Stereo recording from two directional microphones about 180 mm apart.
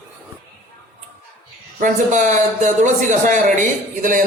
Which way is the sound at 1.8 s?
45° right (ahead or behind).